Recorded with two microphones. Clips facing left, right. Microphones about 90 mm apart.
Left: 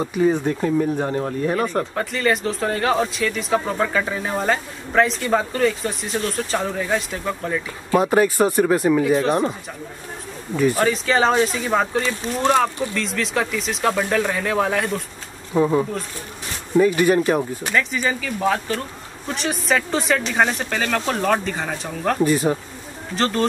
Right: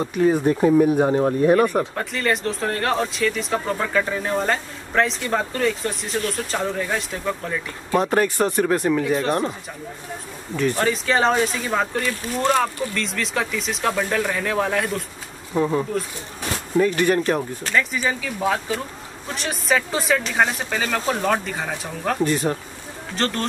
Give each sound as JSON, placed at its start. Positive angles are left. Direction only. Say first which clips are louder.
{"t": 0.0, "sound": "speech", "louder": "even", "side_deg": 0}
{"t": 0.4, "sound": "speech", "louder": "right 4 dB", "side_deg": -15}
{"t": 12.0, "sound": "speech", "louder": "left 1 dB", "side_deg": 25}
{"t": 12.4, "sound": "speech", "louder": "left 2 dB", "side_deg": 10}
{"t": 18.2, "sound": "speech", "louder": "left 2 dB", "side_deg": -5}